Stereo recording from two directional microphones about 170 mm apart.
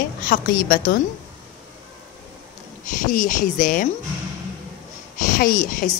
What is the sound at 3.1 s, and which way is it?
Speech, 50° left (ahead or behind).